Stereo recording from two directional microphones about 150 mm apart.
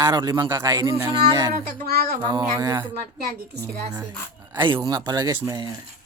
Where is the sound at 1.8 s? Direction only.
90° right.